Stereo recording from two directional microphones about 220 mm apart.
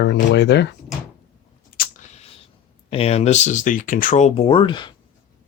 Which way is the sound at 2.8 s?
25° left (ahead or behind).